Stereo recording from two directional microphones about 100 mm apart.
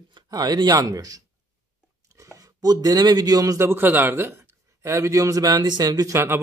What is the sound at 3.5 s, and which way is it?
A man's voice, 25° right (ahead or behind).